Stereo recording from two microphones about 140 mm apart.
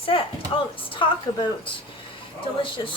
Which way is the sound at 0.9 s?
35° left (ahead or behind).